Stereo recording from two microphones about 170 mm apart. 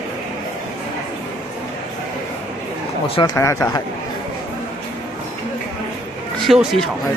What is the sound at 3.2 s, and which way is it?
Speech, 15° left (ahead or behind).